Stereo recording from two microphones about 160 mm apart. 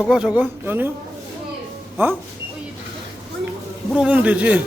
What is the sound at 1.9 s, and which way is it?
Speech, 15° right (ahead or behind).